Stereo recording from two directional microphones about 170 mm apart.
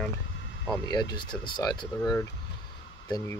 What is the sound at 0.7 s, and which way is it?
Speech, 25° left (ahead or behind).